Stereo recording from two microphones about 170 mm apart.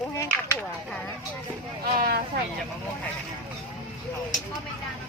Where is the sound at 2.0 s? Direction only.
65° right (ahead or behind).